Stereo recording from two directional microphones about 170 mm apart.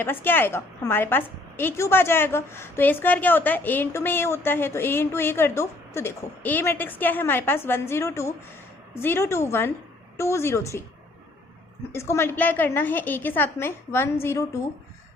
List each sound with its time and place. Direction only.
0.0 s a woman's voice: 10° left (ahead or behind)
11.9 s a woman's voice: 15° left (ahead or behind)